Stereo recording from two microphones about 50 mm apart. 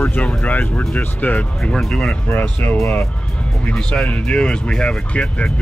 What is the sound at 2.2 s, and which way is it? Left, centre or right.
Speech, left.